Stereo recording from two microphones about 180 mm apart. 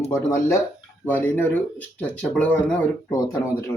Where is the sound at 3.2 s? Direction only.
20° left (ahead or behind).